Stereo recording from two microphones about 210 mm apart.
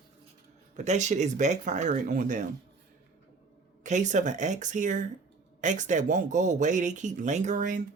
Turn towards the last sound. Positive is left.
turn(degrees=-35)  # may be behind; listen again after turning